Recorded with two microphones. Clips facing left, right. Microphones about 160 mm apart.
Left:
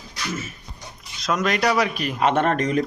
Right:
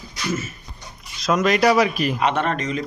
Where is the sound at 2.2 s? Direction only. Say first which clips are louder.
Left 5 dB; 45° left (ahead or behind).